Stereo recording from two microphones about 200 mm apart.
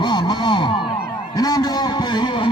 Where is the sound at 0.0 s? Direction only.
25° left (ahead or behind).